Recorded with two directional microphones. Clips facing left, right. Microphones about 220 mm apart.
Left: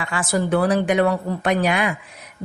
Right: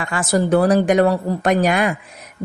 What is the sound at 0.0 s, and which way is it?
A woman's voice, 40° right (ahead or behind).